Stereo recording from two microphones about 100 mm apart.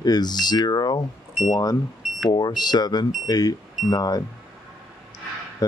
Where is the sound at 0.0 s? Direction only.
45° left (ahead or behind).